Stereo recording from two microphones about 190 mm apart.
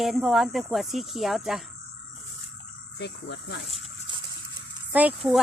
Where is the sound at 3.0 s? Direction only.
65° left (ahead or behind).